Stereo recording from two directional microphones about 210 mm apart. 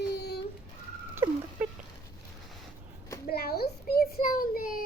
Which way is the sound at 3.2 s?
50° left (ahead or behind).